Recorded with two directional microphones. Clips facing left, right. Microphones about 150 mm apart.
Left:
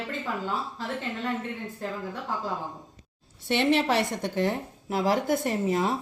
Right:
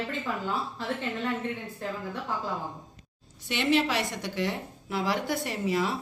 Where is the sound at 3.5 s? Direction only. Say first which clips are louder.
Left 2 dB; 55° left (ahead or behind).